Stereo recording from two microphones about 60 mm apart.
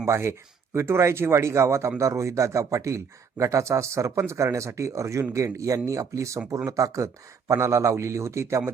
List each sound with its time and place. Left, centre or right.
0.0 s speech: right